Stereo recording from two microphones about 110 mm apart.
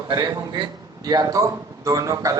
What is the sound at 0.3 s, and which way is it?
A man's voice, 35° right (ahead or behind).